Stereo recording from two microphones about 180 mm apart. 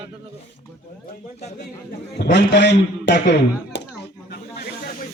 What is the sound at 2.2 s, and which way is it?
A man's voice, 70° left (ahead or behind).